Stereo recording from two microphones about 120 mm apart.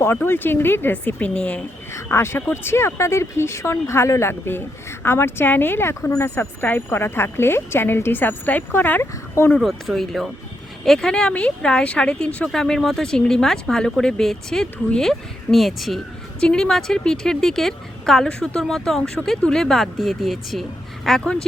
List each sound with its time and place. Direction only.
0.3 s speech: 20° left (ahead or behind)
1.9 s speech: 20° left (ahead or behind)
9.6 s speech: centre (ahead or behind)